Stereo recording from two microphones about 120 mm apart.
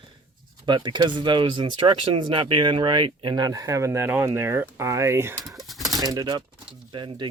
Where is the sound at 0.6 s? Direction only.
40° right (ahead or behind); by 5.3 s 20° right (ahead or behind).